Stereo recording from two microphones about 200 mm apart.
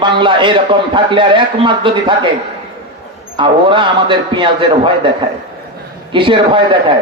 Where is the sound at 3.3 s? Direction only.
25° right (ahead or behind).